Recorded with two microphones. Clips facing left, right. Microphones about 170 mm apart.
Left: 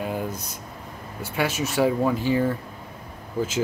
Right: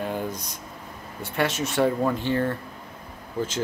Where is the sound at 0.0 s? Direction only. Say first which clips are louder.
Even; 5° left (ahead or behind).